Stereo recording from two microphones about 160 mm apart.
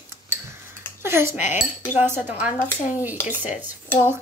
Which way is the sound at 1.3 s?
50° left (ahead or behind).